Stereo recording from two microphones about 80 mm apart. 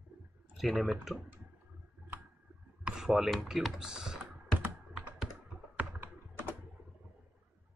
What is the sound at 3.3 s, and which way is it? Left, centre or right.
Speech, centre.